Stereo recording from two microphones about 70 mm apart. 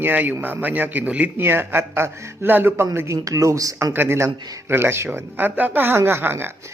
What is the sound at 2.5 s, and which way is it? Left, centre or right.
A man's voice, right.